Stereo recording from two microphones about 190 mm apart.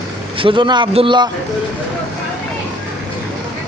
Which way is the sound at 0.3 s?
25° right (ahead or behind).